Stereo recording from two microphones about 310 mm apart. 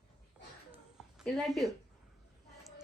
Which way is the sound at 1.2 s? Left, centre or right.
Centre.